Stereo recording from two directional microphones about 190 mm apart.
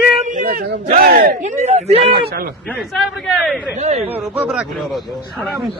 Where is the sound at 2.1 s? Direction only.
55° right (ahead or behind).